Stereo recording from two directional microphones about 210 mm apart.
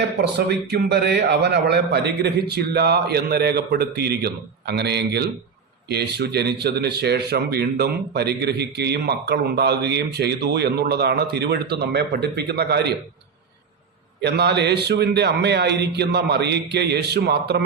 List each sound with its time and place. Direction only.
0.2 s speech: 50° right (ahead or behind)
14.2 s speech: 55° right (ahead or behind)